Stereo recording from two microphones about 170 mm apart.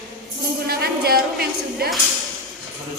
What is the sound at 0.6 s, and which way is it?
A woman's voice, 65° right (ahead or behind).